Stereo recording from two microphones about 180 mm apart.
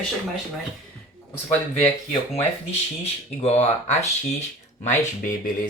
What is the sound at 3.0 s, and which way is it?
Speech, 35° left (ahead or behind).